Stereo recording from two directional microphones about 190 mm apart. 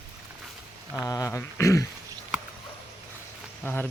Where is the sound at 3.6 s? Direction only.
10° left (ahead or behind).